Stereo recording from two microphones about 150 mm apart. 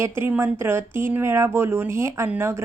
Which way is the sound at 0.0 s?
15° right (ahead or behind).